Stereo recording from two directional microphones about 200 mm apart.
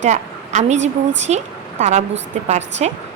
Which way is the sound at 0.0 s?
35° right (ahead or behind).